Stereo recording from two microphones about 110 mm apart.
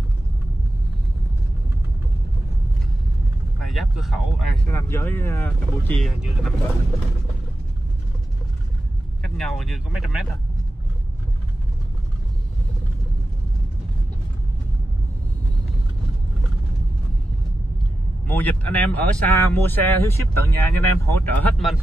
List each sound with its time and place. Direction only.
3.6 s speech: centre (ahead or behind)
4.6 s speech: 25° left (ahead or behind)
5.9 s speech: 5° left (ahead or behind)
9.2 s speech: 5° left (ahead or behind)
18.2 s speech: 15° left (ahead or behind)